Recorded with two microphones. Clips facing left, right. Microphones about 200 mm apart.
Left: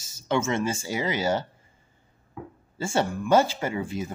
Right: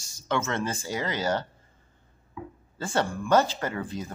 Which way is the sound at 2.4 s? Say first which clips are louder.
Even; 50° left (ahead or behind).